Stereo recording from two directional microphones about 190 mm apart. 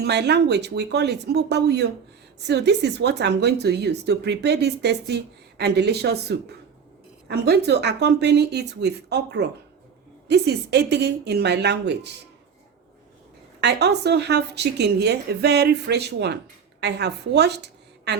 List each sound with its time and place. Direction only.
0.0 s speech: 60° right (ahead or behind)
13.6 s a woman's voice: 60° right (ahead or behind)